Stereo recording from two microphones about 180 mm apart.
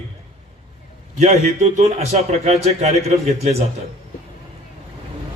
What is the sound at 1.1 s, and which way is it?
A man's voice, 40° right (ahead or behind).